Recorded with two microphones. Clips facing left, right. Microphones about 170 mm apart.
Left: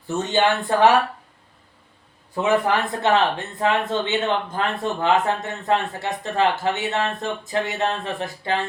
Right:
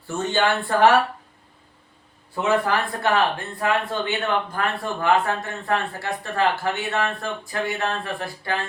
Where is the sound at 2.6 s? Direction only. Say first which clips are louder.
Left 2 dB; 20° left (ahead or behind).